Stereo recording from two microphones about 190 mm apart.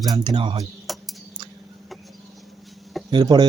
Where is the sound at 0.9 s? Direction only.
Centre (ahead or behind).